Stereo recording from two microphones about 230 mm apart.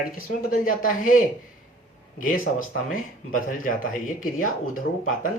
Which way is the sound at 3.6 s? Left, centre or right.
Left.